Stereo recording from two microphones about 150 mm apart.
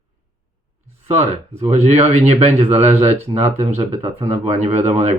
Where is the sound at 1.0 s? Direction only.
45° right (ahead or behind).